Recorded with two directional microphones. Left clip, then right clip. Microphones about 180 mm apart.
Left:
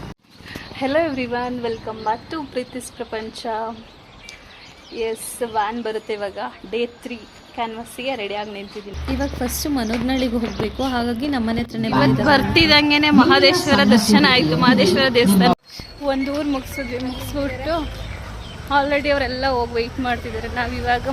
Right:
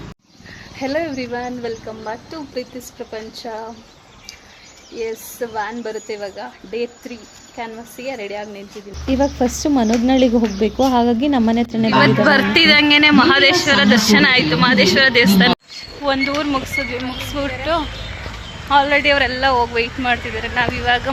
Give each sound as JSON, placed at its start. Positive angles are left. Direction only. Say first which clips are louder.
{"t": 0.8, "sound": "a woman's voice", "louder": "left 2 dB", "side_deg": 0}
{"t": 4.9, "sound": "a woman's voice", "louder": "even", "side_deg": 0}
{"t": 9.0, "sound": "speech", "louder": "right 8 dB", "side_deg": -20}
{"t": 11.9, "sound": "a woman's voice", "louder": "right 3 dB", "side_deg": -5}